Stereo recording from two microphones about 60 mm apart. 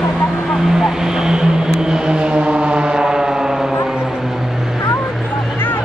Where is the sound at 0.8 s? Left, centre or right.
Centre.